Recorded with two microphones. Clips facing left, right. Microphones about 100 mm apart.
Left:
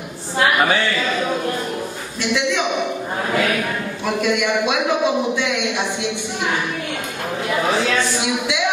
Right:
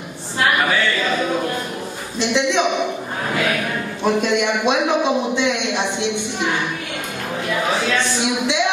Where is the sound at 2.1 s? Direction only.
20° right (ahead or behind).